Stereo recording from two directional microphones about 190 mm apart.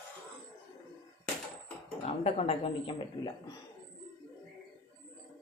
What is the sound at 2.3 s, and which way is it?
Speech, 30° left (ahead or behind).